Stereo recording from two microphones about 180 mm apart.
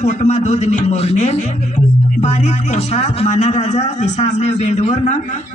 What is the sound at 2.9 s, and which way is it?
A man's voice, 40° left (ahead or behind).